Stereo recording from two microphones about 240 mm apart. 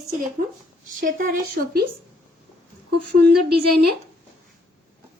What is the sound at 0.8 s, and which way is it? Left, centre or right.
Speech, right.